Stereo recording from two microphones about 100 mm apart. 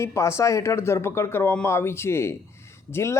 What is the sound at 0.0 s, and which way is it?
Speech, 30° left (ahead or behind).